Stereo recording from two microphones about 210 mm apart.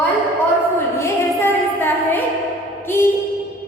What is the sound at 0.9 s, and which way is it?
Music, 10° left (ahead or behind).